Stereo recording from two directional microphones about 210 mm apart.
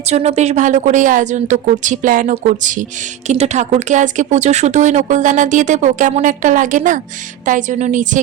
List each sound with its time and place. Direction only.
0.1 s speech: 30° right (ahead or behind)